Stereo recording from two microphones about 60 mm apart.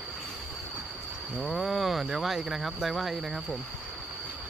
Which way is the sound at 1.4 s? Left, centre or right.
Centre.